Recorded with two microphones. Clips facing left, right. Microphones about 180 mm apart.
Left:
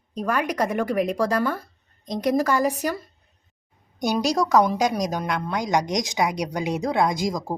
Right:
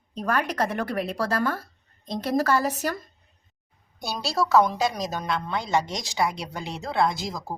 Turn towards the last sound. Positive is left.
turn(degrees=15)  # may be behind; listen again after turning